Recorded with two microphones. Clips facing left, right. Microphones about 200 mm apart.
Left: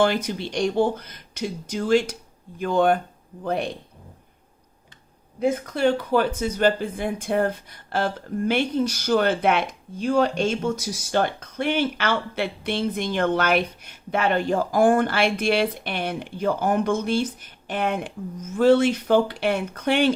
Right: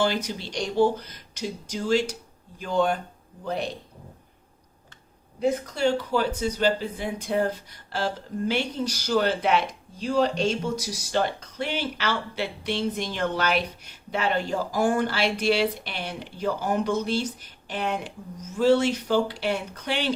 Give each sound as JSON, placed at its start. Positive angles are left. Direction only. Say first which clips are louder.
{"t": 0.0, "sound": "speech", "louder": "left 4 dB", "side_deg": 55}
{"t": 5.4, "sound": "speech", "louder": "left 2 dB", "side_deg": 55}